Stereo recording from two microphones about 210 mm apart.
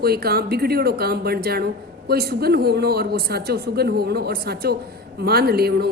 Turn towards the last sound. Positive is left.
turn(degrees=-50)  # may be behind; listen again after turning